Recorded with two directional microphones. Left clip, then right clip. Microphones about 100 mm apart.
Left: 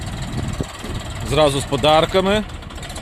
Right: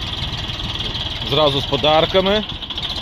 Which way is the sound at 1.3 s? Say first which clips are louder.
Even; 50° left (ahead or behind).